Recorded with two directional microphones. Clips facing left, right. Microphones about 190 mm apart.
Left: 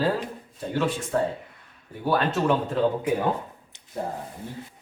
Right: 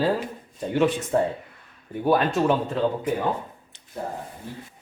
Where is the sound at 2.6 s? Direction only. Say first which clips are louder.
Left 1 dB; 5° left (ahead or behind).